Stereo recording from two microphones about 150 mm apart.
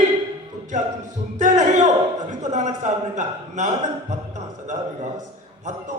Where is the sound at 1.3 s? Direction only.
50° right (ahead or behind).